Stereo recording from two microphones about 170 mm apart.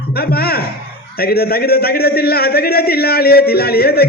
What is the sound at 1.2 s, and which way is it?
A man's voice, 65° left (ahead or behind).